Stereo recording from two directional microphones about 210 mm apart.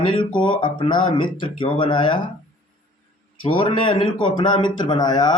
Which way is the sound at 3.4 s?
25° left (ahead or behind).